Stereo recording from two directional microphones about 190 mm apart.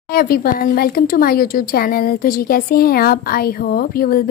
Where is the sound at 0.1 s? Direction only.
50° left (ahead or behind).